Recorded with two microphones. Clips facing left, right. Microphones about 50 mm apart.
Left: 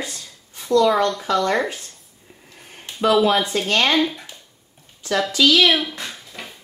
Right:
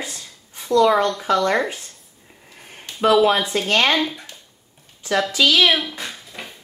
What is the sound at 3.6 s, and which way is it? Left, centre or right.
Speech, centre.